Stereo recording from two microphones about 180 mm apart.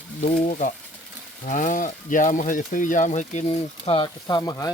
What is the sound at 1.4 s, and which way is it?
Speech, 45° left (ahead or behind).